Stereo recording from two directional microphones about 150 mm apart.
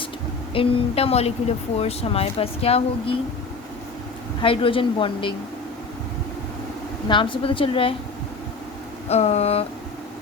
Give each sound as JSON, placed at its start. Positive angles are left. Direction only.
{"t": 0.5, "sound": "speech", "side_deg": 40}
{"t": 4.4, "sound": "speech", "side_deg": 35}
{"t": 7.1, "sound": "speech", "side_deg": 35}
{"t": 9.0, "sound": "speech", "side_deg": 45}